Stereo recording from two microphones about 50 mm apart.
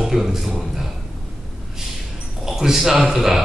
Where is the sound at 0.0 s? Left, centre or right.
Centre.